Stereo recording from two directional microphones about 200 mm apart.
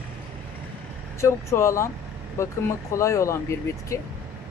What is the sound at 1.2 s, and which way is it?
Speech, 15° left (ahead or behind).